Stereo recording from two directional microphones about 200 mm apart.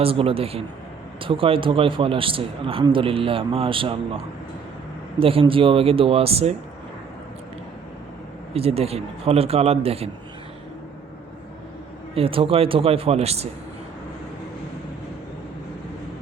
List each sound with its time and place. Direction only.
0.0 s a man's voice: 30° right (ahead or behind)
5.2 s a man's voice: 25° right (ahead or behind)
8.5 s a man's voice: 30° right (ahead or behind)
12.1 s a man's voice: 25° right (ahead or behind)